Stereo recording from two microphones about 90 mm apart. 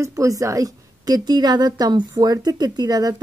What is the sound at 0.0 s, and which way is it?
A woman's voice, 35° right (ahead or behind).